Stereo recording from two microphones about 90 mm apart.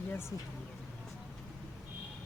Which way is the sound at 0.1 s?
25° left (ahead or behind).